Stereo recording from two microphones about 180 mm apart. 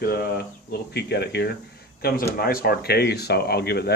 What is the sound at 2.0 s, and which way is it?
Speech, 60° left (ahead or behind).